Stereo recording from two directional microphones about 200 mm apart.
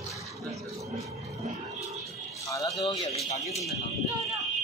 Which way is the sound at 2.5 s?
15° left (ahead or behind).